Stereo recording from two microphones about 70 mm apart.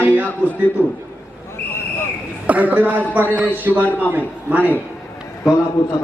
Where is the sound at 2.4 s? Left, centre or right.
Right.